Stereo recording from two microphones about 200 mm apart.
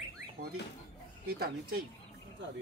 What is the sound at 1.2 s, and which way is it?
Chicken, 50° right (ahead or behind).